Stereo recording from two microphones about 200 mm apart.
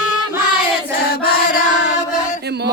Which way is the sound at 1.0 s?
50° left (ahead or behind).